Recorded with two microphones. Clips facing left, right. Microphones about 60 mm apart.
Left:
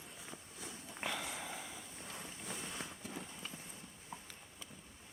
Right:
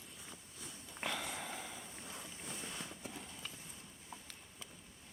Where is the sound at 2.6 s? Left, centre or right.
Centre.